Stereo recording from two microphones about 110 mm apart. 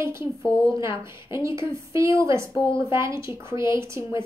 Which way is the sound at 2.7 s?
25° right (ahead or behind).